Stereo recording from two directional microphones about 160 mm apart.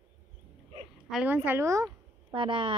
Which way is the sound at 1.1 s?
10° right (ahead or behind).